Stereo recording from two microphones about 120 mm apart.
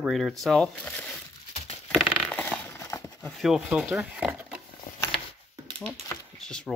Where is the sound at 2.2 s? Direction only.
10° left (ahead or behind).